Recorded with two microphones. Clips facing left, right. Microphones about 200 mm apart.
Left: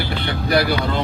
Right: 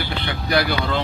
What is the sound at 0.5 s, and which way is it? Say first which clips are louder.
Speech: left 2 dB; 35° left (ahead or behind).